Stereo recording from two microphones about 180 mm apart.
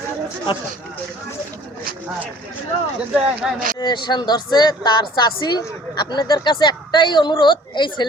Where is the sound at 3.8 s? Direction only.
25° left (ahead or behind).